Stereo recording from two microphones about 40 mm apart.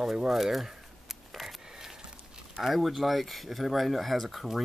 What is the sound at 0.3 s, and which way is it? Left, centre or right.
Speech, centre.